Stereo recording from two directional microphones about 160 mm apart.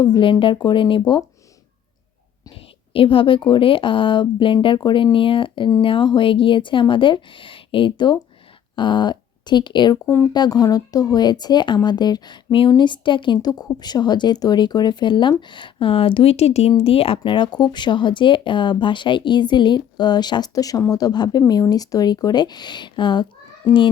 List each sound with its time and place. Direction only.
0.0 s speech: 30° left (ahead or behind)
2.9 s speech: 35° left (ahead or behind)